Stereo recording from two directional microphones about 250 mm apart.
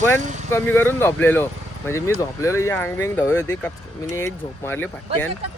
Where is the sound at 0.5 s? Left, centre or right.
Centre.